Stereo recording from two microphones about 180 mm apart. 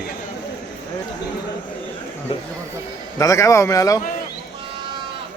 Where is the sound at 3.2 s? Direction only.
15° left (ahead or behind).